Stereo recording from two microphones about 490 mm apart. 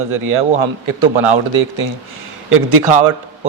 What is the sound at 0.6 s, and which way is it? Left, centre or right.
Speech, right.